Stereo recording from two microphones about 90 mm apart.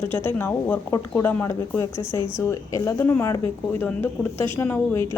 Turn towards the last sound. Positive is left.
turn(degrees=25)  # may be behind; listen again after turning